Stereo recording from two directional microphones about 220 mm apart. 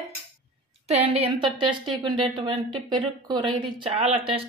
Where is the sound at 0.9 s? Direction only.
30° right (ahead or behind).